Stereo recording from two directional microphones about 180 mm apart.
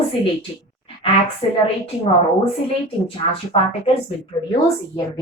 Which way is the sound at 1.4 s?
30° left (ahead or behind).